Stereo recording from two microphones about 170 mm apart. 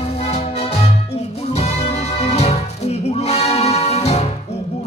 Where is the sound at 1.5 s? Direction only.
40° left (ahead or behind).